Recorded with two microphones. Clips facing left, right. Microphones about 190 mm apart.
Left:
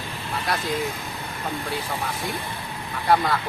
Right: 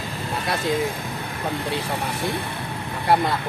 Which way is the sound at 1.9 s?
70° right (ahead or behind).